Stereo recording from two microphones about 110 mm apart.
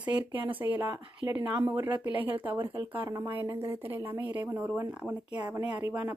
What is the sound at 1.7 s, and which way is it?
Speech, 15° right (ahead or behind).